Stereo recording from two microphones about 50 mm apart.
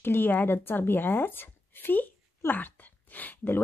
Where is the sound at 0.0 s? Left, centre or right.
Left.